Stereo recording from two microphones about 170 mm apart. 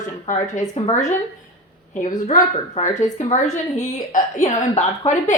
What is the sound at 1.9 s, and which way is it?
A woman's voice, 50° left (ahead or behind).